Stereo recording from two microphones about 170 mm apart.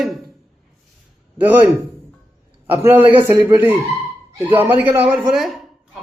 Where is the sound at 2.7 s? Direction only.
10° right (ahead or behind).